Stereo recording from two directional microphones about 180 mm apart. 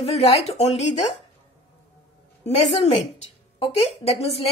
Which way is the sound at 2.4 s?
40° left (ahead or behind).